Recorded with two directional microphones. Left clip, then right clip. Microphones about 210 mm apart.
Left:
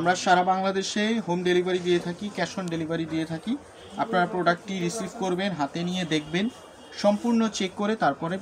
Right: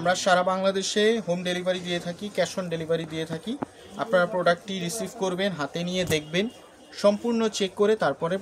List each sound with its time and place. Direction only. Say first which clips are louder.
0.0 s speech: even; 50° right (ahead or behind)